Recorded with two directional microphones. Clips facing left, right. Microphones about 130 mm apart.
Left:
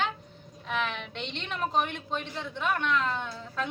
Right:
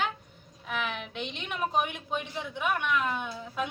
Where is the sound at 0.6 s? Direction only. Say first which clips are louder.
Left 2 dB; 5° right (ahead or behind).